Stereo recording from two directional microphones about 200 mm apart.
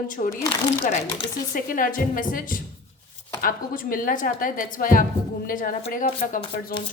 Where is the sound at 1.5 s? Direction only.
40° left (ahead or behind).